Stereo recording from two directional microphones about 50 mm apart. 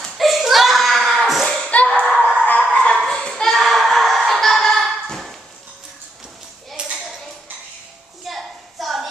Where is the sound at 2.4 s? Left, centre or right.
Left.